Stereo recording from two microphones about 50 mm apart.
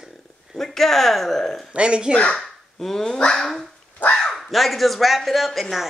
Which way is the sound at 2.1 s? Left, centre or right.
Left.